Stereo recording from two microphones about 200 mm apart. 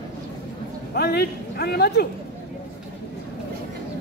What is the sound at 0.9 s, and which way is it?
A man's voice, 55° left (ahead or behind).